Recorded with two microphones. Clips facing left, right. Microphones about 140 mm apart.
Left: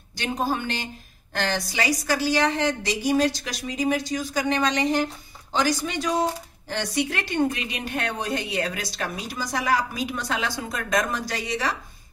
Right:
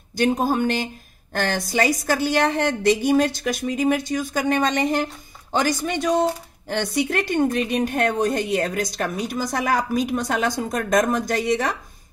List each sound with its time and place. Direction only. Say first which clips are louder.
0.1 s a woman's voice: right 6 dB; 45° right (ahead or behind)